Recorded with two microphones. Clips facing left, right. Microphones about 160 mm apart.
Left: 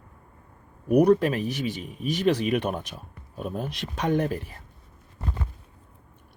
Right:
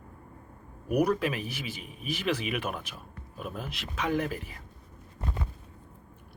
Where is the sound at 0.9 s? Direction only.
35° left (ahead or behind).